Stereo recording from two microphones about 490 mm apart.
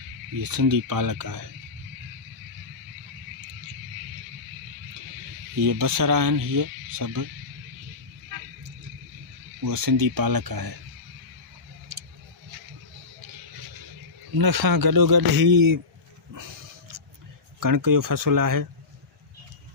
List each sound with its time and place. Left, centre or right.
0.3 s speech: right
5.5 s speech: right
9.6 s speech: right
14.3 s speech: right
17.6 s speech: right